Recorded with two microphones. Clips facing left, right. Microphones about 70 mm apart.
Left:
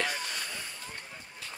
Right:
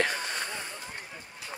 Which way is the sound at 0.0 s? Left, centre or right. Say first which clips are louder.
Right 4 dB; right.